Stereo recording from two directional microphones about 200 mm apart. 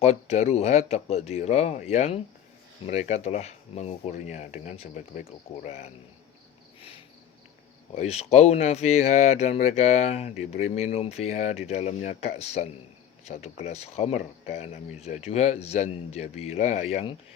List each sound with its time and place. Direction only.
0.0 s speech: 35° left (ahead or behind)
7.9 s speech: 35° left (ahead or behind)